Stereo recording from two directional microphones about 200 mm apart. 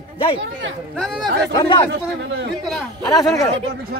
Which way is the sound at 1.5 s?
20° left (ahead or behind).